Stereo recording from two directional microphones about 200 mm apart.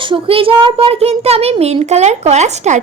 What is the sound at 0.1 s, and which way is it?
A child's voice, 25° right (ahead or behind).